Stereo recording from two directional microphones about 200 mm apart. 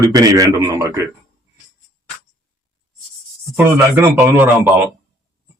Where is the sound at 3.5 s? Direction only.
10° right (ahead or behind).